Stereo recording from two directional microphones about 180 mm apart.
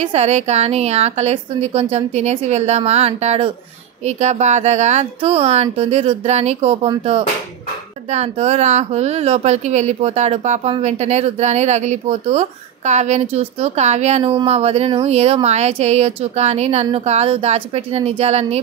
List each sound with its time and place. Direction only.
0.0 s speech: 35° right (ahead or behind)
8.1 s speech: 35° right (ahead or behind)